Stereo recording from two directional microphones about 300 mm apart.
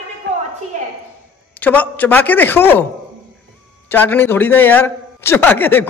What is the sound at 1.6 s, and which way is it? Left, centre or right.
Speech, centre.